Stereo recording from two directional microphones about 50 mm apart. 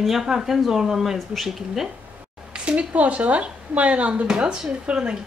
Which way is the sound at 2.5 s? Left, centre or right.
Right.